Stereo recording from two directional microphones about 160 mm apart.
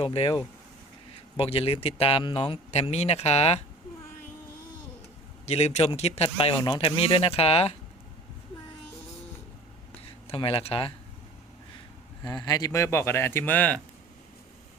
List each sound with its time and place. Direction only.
0.0 s speech: 40° left (ahead or behind)
1.4 s speech: 35° left (ahead or behind)
5.5 s speech: 45° left (ahead or behind)
10.2 s speech: 35° left (ahead or behind)
12.2 s speech: 25° left (ahead or behind); by 13.8 s 10° left (ahead or behind)